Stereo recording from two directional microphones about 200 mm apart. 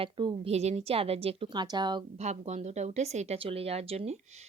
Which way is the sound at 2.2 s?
35° right (ahead or behind).